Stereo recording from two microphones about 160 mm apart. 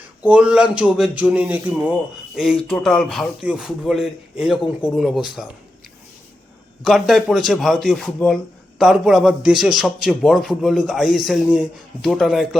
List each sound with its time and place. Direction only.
0.2 s a man's voice: 5° right (ahead or behind)
6.8 s a man's voice: centre (ahead or behind)